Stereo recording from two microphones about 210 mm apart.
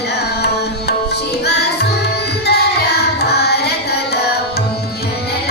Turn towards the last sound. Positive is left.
turn(degrees=50)  # may be behind; listen again after turning